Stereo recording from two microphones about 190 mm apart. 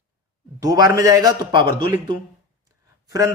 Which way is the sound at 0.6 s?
20° right (ahead or behind).